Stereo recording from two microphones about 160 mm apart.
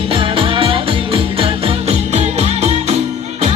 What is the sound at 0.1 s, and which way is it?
Music, 35° right (ahead or behind).